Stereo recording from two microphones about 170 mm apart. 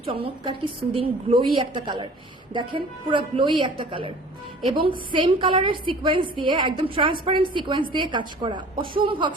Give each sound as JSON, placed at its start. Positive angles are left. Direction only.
{"t": 0.0, "sound": "a woman's voice", "side_deg": -30}